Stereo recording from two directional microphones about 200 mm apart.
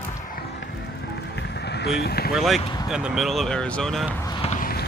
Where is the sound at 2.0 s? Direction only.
50° left (ahead or behind).